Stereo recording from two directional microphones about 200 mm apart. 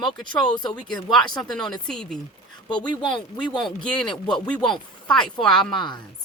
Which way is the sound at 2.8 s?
25° left (ahead or behind).